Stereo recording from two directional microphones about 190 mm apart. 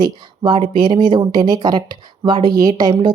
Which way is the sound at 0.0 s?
25° right (ahead or behind).